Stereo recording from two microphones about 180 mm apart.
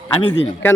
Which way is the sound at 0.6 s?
10° left (ahead or behind).